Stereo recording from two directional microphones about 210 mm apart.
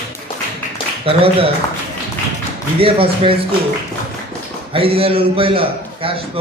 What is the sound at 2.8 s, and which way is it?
Speech, 25° right (ahead or behind).